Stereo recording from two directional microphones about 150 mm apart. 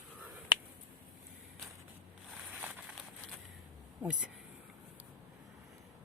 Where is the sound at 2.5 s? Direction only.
5° right (ahead or behind).